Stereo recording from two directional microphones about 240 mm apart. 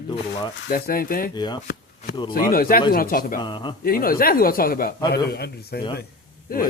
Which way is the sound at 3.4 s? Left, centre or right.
Centre.